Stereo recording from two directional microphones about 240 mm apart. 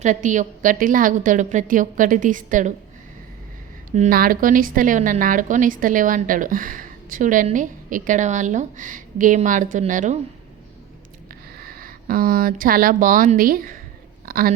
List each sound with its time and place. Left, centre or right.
0.0 s a woman's voice: right
3.9 s a woman's voice: right
11.5 s speech: right